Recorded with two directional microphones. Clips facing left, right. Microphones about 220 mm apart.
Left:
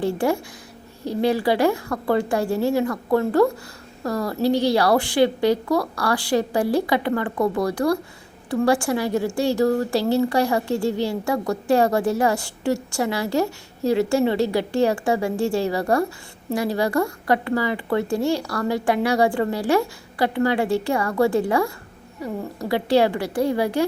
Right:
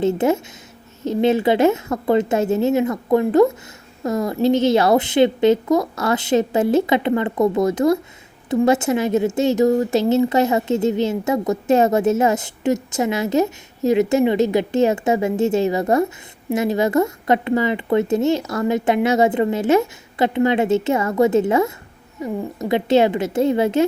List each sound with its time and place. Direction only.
0.0 s a woman's voice: 20° right (ahead or behind)